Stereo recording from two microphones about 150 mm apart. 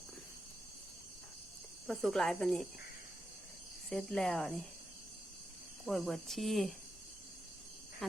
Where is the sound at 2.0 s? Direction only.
Centre (ahead or behind).